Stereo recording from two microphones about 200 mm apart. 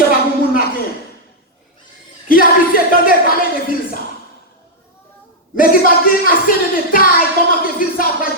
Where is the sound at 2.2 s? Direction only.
45° left (ahead or behind).